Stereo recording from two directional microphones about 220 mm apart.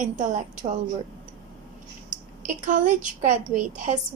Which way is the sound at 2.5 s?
35° right (ahead or behind).